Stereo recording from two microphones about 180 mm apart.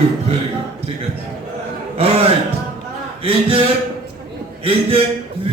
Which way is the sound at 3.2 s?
30° right (ahead or behind).